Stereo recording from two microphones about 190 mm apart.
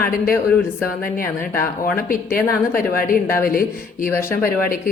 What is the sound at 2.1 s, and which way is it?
Speech, 50° left (ahead or behind).